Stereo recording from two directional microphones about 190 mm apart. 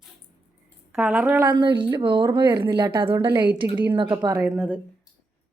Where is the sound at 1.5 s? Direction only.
25° right (ahead or behind).